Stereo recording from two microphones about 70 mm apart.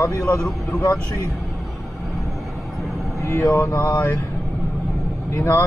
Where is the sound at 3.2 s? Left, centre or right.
Left.